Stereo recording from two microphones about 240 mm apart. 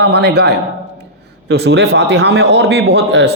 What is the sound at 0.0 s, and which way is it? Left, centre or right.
A man's voice, right.